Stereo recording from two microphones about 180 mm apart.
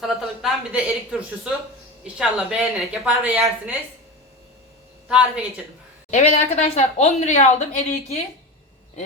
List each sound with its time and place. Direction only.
0.0 s a sound: centre (ahead or behind)
2.1 s speech: 5° right (ahead or behind)
5.0 s speech: 5° right (ahead or behind)
6.1 s a woman's voice: 40° left (ahead or behind)